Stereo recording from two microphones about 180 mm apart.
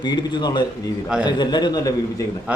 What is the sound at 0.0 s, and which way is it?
A man's voice, 25° left (ahead or behind).